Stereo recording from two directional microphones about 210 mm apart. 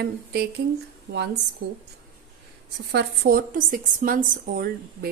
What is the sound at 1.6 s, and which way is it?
Speech, 55° right (ahead or behind).